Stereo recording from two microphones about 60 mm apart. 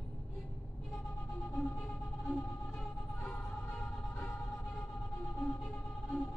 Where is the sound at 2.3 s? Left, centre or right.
Left.